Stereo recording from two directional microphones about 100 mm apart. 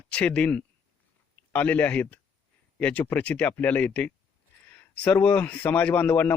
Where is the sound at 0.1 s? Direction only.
10° left (ahead or behind).